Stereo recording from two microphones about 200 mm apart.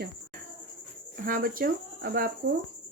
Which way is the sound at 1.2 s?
45° right (ahead or behind).